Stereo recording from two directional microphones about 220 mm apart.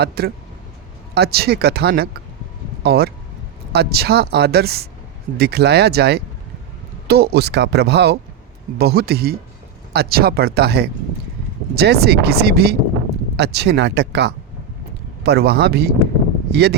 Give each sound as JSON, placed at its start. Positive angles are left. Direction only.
{"t": 0.2, "sound": "speech", "side_deg": -45}